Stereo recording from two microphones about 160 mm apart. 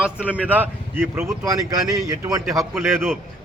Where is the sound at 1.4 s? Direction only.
25° right (ahead or behind).